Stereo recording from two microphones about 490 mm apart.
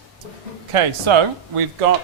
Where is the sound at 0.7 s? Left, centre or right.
Right.